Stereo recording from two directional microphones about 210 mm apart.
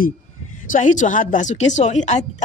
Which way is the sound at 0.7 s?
35° left (ahead or behind).